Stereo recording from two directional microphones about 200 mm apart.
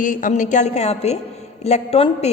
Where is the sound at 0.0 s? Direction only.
40° left (ahead or behind).